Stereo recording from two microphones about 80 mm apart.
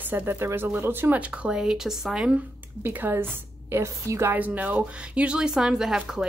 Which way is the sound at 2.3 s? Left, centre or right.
Right.